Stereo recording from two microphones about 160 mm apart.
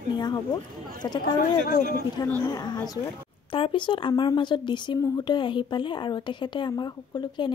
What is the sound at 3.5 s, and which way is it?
Speech, 30° left (ahead or behind).